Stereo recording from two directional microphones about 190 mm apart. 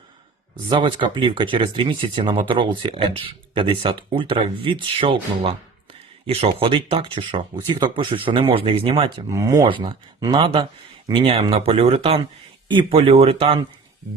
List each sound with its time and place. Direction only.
0.7 s speech: 25° right (ahead or behind)
9.3 s speech: 15° right (ahead or behind)